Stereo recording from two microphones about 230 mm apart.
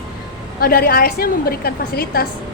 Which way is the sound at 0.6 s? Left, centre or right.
Left.